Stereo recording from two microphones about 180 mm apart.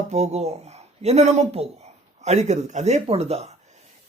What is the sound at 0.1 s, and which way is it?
Speech, 35° right (ahead or behind).